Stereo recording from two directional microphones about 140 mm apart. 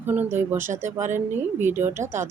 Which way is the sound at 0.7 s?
60° right (ahead or behind).